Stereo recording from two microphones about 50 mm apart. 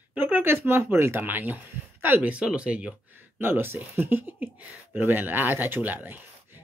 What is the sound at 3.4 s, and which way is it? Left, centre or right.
Speech, right.